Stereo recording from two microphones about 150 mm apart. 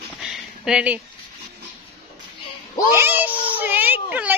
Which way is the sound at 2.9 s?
15° right (ahead or behind).